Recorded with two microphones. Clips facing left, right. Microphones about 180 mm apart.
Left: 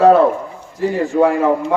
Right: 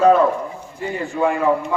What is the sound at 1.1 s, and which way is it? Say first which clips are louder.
Speech: left 6 dB; 50° left (ahead or behind).